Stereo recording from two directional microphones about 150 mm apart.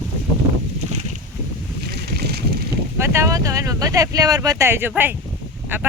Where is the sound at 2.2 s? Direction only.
90° right.